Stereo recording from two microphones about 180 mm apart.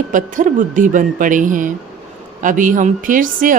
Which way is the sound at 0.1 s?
45° right (ahead or behind).